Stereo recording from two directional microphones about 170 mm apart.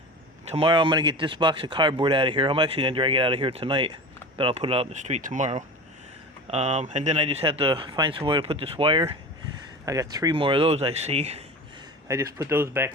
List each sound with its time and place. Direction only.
0.5 s speech: 30° right (ahead or behind)
9.8 s speech: 20° right (ahead or behind); by 11.4 s 40° right (ahead or behind)
12.0 s speech: 15° right (ahead or behind)